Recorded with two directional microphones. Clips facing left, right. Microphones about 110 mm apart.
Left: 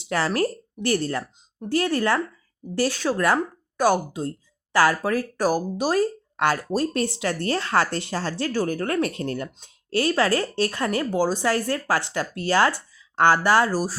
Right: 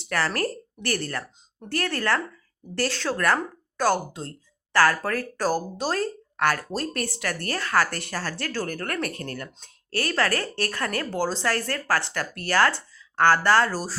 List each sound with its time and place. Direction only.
0.0 s speech: 15° left (ahead or behind)